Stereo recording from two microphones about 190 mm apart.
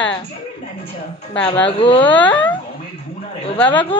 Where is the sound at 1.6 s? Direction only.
25° left (ahead or behind).